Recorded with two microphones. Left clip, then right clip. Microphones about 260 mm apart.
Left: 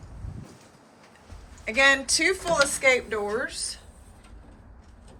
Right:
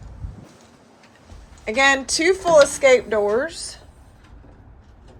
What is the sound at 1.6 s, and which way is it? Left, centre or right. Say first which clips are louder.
A woman's voice: right 3 dB; centre.